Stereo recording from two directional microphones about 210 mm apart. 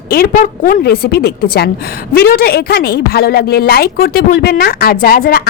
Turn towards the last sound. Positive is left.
turn(degrees=45)  # may be behind; listen again after turning